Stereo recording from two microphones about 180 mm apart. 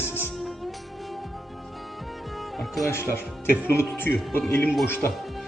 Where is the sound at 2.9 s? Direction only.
15° left (ahead or behind).